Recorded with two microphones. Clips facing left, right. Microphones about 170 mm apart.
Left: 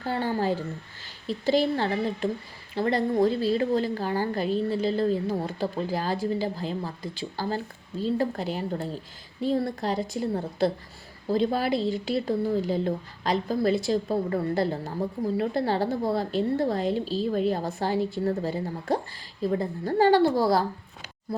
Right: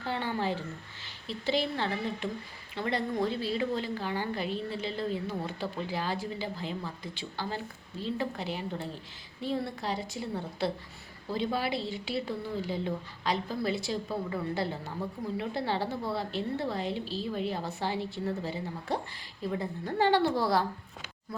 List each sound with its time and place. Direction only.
0.0 s a woman's voice: 40° left (ahead or behind)